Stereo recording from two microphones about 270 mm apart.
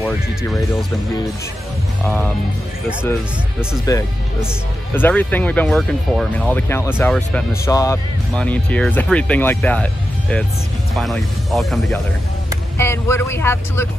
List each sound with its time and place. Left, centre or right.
0.0 s speech: centre
2.0 s speech: centre
3.9 s speech: centre
11.0 s speech: centre